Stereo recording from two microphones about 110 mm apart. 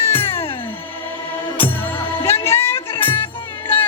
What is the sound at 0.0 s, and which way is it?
Music, 20° left (ahead or behind).